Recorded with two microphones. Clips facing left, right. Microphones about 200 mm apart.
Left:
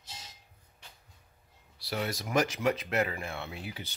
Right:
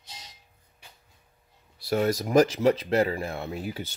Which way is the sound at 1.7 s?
50° right (ahead or behind).